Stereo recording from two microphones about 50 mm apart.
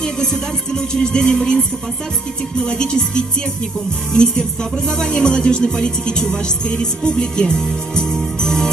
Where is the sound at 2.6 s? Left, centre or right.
Centre.